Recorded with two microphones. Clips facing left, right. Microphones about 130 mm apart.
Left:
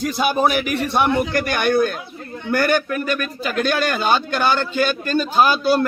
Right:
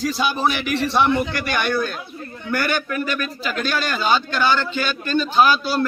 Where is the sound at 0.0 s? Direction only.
55° left (ahead or behind).